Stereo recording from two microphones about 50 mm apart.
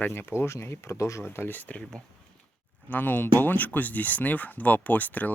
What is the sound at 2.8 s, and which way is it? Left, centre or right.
Speech, left.